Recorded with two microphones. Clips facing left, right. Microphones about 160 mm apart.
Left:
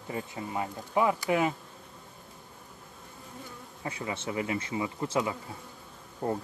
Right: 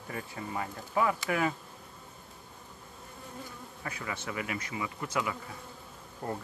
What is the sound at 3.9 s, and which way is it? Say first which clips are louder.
Speech: left 4 dB; 25° left (ahead or behind).